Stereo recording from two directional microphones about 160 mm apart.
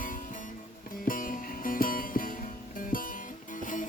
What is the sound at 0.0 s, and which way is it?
Music, 55° left (ahead or behind).